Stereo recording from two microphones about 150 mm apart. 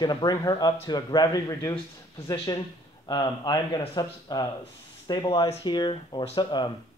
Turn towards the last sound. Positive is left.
turn(degrees=30)  # may be behind; listen again after turning